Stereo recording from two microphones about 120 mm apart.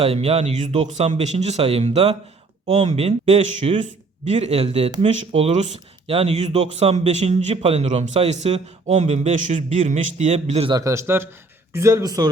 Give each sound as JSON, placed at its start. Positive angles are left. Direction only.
{"t": 0.0, "sound": "speech", "side_deg": -55}
{"t": 6.1, "sound": "speech", "side_deg": -55}
{"t": 10.7, "sound": "a man's voice", "side_deg": -30}